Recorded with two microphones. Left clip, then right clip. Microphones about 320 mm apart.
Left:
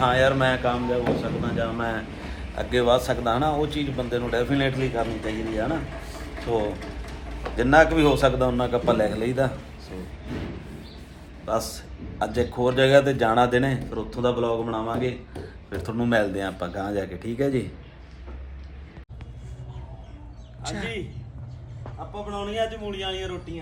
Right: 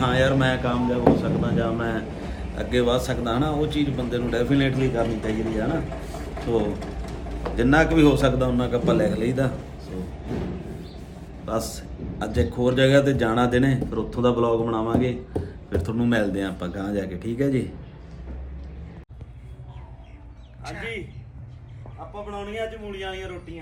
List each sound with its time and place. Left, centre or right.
0.0 s a man's voice: centre
6.7 s mechanisms: right
7.5 s a man's voice: centre
10.3 s thump: right
11.4 s a man's voice: centre
20.7 s a man's voice: centre
22.1 s a man's voice: centre